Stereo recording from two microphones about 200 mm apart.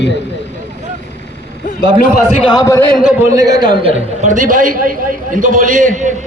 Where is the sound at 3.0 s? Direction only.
5° right (ahead or behind).